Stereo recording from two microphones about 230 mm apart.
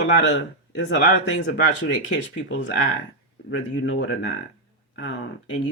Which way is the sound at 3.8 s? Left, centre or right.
Left.